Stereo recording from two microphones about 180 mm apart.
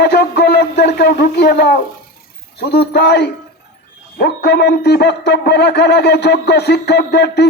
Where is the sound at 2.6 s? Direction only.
65° left (ahead or behind).